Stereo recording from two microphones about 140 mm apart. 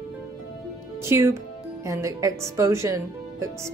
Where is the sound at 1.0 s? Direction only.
20° right (ahead or behind).